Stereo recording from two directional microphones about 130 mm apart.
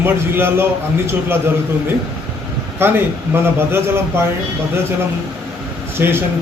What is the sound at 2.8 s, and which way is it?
A man's voice, 15° right (ahead or behind).